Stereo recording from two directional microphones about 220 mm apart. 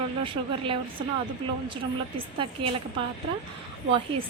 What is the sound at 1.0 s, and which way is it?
Speech, 20° right (ahead or behind).